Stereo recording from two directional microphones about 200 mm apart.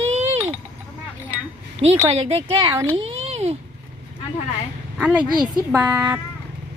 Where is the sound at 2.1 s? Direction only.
30° right (ahead or behind).